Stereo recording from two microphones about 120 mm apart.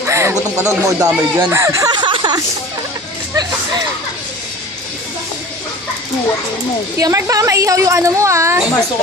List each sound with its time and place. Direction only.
0.0 s a woman's voice: 20° right (ahead or behind)
1.9 s a sound: 40° right (ahead or behind)
7.0 s a woman's voice: 25° right (ahead or behind)